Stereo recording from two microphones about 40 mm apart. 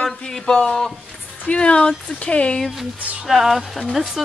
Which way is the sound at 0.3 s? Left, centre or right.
Centre.